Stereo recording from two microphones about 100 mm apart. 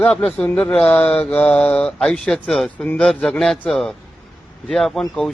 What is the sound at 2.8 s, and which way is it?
Mantra, 10° left (ahead or behind).